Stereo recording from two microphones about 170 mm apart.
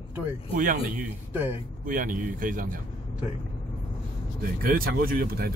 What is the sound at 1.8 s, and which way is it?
Speech, 55° right (ahead or behind).